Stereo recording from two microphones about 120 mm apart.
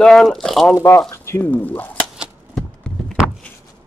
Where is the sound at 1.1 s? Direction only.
20° left (ahead or behind).